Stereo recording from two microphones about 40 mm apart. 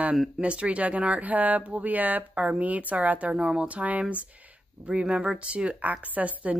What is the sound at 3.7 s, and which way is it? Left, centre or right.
Speech, right.